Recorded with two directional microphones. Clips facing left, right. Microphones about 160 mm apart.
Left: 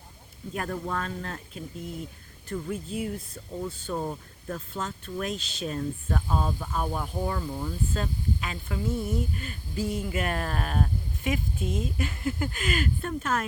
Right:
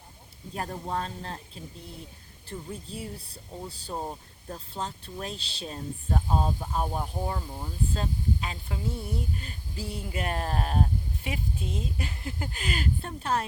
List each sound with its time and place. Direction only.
0.5 s speech: 30° right (ahead or behind)
2.5 s speech: 25° right (ahead or behind)
2.9 s speech: 35° right (ahead or behind)